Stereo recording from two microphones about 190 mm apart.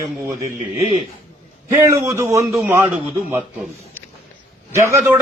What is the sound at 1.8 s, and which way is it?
A man's voice, 15° right (ahead or behind).